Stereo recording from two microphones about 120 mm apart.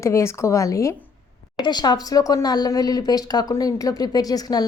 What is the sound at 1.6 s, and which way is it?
Speech, 35° left (ahead or behind).